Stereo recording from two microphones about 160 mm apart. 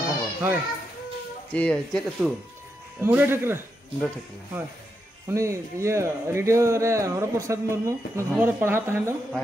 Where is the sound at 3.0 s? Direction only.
15° right (ahead or behind).